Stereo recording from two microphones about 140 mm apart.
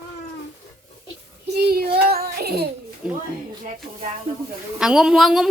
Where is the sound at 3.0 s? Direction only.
5° right (ahead or behind).